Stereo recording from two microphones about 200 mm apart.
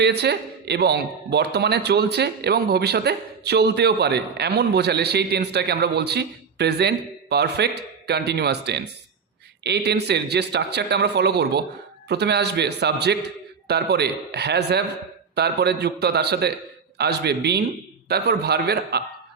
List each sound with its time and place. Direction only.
0.0 s a man's voice: 55° right (ahead or behind)